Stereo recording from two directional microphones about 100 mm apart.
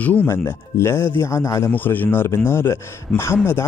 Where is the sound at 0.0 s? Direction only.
15° left (ahead or behind).